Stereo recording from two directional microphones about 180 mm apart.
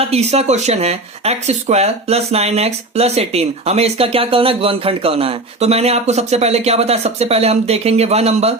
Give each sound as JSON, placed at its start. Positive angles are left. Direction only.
{"t": 0.0, "sound": "speech", "side_deg": -35}